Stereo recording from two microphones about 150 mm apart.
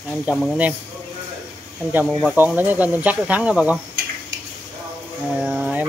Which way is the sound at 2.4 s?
10° right (ahead or behind).